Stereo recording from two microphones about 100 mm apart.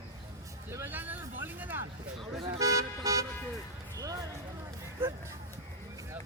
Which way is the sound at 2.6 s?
35° right (ahead or behind).